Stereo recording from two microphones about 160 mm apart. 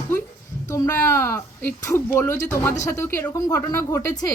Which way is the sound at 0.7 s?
20° left (ahead or behind).